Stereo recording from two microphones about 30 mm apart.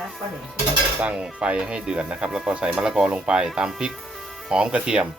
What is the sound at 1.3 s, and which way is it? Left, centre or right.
Speech, right.